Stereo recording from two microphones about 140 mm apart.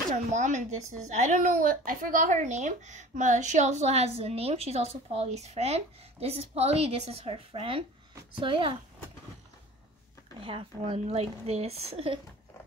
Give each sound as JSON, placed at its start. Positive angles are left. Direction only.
{"t": 0.1, "sound": "a woman's voice", "side_deg": -60}
{"t": 10.4, "sound": "a woman's voice", "side_deg": -40}